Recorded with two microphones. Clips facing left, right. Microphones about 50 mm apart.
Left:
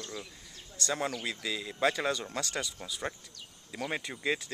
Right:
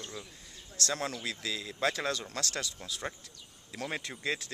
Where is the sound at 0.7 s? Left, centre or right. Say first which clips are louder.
Left 1 dB; centre.